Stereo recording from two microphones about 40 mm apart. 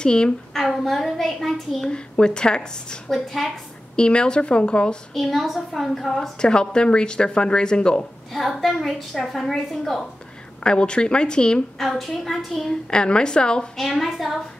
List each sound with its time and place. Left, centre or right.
0.0 s a woman's voice: left
0.5 s a woman's voice: centre
1.9 s a woman's voice: left
3.1 s a child's voice: centre
3.9 s a woman's voice: left
5.1 s a child's voice: centre
8.3 s a child's voice: centre
10.6 s a woman's voice: left
11.8 s a child's voice: centre
12.9 s a woman's voice: left
13.7 s a child's voice: centre